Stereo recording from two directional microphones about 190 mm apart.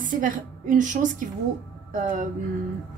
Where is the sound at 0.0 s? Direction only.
45° right (ahead or behind).